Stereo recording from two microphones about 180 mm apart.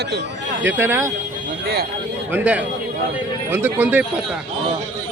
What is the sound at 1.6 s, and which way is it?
Speech, 60° right (ahead or behind).